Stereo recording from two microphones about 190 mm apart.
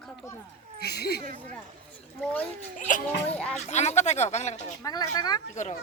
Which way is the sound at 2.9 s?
45° left (ahead or behind).